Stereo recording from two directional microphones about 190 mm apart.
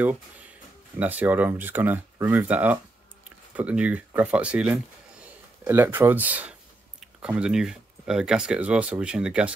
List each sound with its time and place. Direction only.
0.0 s speech: 10° right (ahead or behind)